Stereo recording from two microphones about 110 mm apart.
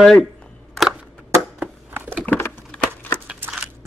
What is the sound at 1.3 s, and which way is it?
Crushing, 20° right (ahead or behind).